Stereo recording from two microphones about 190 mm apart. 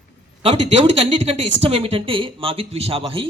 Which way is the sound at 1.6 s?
30° right (ahead or behind).